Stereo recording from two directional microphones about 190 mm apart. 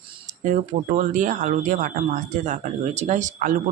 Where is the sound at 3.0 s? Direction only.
40° right (ahead or behind).